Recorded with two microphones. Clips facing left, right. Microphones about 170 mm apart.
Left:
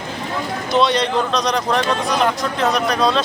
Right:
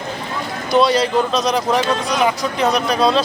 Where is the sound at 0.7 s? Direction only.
5° right (ahead or behind).